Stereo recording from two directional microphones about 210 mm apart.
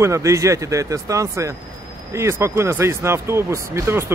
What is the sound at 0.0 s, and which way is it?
Speech, 15° right (ahead or behind).